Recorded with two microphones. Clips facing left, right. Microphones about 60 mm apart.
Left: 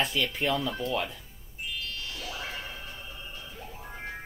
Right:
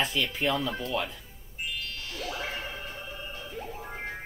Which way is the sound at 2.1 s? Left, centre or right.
Right.